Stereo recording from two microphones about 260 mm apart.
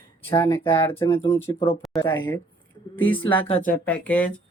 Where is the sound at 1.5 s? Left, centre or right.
Left.